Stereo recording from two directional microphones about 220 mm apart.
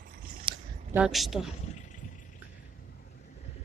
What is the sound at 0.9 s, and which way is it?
Speech, centre (ahead or behind).